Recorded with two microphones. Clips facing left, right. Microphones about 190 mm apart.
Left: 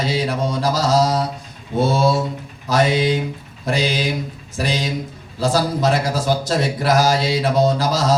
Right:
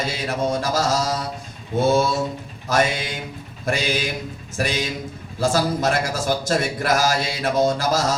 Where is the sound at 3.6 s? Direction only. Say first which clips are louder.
Left 3 dB; 50° right (ahead or behind).